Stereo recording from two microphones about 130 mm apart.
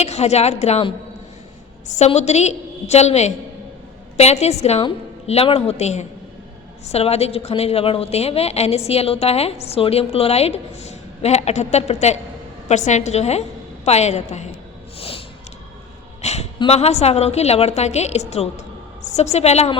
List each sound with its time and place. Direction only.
0.0 s a woman's voice: 55° left (ahead or behind)
2.0 s a woman's voice: 60° left (ahead or behind)
14.9 s snort: 45° left (ahead or behind)
16.2 s a sound: 55° left (ahead or behind)
16.6 s a woman's voice: 50° left (ahead or behind)